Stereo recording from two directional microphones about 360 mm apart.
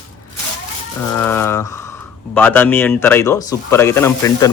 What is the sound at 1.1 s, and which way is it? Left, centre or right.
Speech, centre.